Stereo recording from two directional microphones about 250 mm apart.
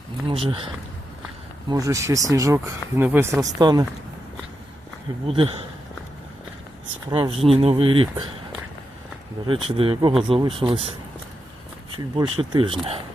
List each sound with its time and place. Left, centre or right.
0.3 s speech: right
1.7 s speech: centre
5.2 s speech: right
7.1 s speech: right
9.5 s speech: right
12.1 s speech: centre